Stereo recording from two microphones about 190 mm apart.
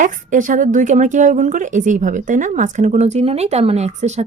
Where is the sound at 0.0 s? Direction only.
45° right (ahead or behind).